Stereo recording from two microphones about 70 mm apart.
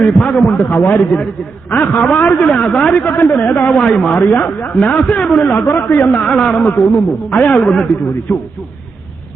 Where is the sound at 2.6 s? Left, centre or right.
Centre.